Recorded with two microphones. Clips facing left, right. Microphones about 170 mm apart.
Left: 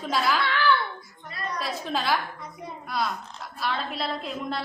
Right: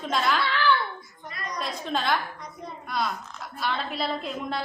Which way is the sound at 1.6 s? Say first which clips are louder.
Right 1 dB; 5° left (ahead or behind).